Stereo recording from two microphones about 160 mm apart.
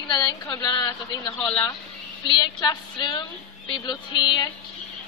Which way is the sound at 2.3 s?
25° left (ahead or behind).